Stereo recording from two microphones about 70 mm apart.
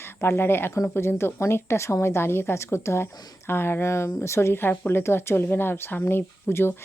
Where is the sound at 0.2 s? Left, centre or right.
Left.